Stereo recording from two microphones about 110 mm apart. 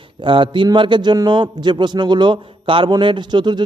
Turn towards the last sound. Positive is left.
turn(degrees=-40)  # may be behind; listen again after turning